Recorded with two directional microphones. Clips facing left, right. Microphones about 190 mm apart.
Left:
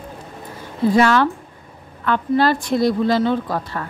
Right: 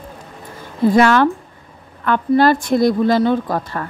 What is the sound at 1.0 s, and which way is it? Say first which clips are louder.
Speech: right 3 dB; 50° right (ahead or behind).